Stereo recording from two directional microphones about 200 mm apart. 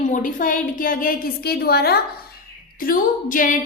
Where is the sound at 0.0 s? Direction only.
40° left (ahead or behind).